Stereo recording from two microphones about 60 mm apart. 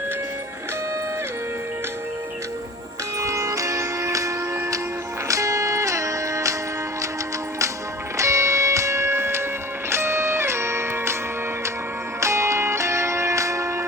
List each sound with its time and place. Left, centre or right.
3.2 s music: right
5.3 s music: right
8.2 s music: right
12.2 s music: right